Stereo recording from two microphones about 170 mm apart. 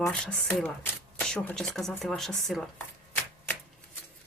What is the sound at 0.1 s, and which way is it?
Speech, 5° left (ahead or behind).